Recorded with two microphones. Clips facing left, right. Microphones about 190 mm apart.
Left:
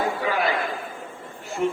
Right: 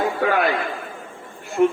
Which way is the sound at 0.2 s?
60° right (ahead or behind).